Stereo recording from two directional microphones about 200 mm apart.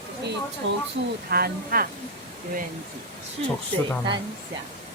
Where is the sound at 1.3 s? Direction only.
50° right (ahead or behind).